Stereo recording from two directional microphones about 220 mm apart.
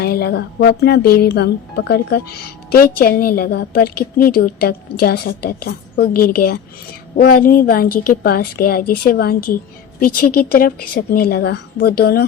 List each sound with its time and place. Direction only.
0.0 s a woman's voice: 45° left (ahead or behind)